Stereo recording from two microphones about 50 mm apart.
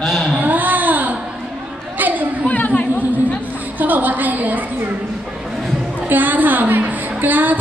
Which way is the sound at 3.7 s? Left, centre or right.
Right.